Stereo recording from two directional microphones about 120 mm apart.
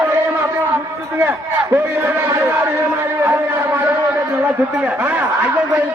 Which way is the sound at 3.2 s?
20° right (ahead or behind).